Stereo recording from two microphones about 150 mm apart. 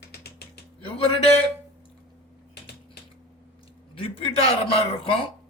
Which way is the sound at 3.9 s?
40° left (ahead or behind).